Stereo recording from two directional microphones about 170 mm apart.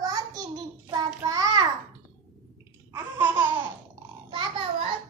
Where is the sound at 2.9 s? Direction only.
15° right (ahead or behind).